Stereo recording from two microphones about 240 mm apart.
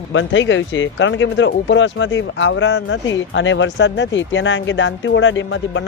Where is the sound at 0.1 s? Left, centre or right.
Left.